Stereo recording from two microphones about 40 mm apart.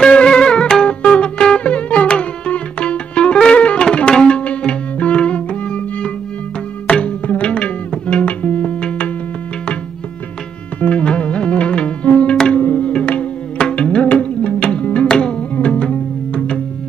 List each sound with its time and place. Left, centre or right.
0.0 s music: left
3.8 s tabla: left
6.9 s music: left
10.8 s music: left
15.0 s music: left